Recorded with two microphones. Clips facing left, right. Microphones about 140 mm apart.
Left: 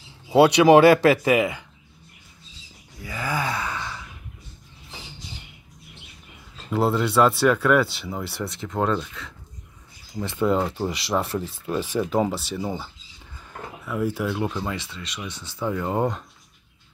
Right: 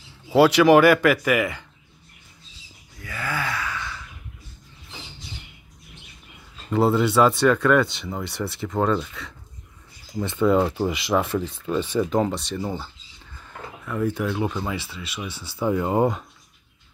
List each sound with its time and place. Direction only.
0.3 s speech: 20° left (ahead or behind)
3.0 s gasp: 15° left (ahead or behind)
6.7 s speech: centre (ahead or behind)